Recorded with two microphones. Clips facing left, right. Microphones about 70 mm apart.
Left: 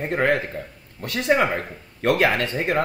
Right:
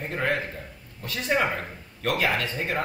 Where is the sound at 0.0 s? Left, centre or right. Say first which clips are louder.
Left 6 dB; left.